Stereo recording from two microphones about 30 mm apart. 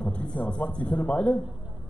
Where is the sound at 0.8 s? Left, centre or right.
Left.